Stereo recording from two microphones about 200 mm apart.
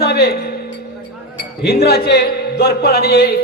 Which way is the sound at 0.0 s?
50° left (ahead or behind).